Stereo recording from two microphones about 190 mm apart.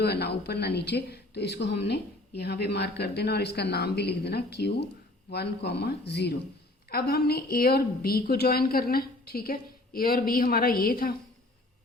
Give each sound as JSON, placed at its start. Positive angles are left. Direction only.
{"t": 0.0, "sound": "a woman's voice", "side_deg": 60}